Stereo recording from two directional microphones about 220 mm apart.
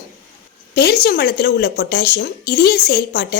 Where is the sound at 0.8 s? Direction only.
50° left (ahead or behind).